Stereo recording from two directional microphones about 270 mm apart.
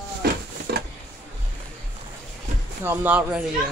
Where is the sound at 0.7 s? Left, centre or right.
Right.